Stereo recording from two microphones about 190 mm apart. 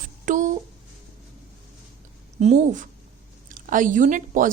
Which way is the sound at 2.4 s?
35° right (ahead or behind).